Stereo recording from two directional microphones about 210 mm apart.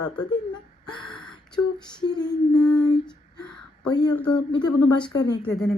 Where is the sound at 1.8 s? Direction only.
20° left (ahead or behind).